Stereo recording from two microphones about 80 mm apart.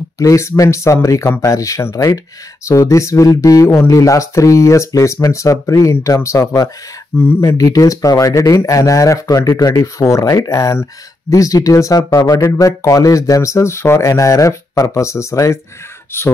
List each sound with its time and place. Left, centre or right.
0.2 s speech: left
7.2 s speech: left
7.5 s speech: left
16.1 s speech: left